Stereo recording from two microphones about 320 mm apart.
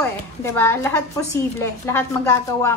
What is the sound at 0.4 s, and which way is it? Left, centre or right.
A woman's voice, centre.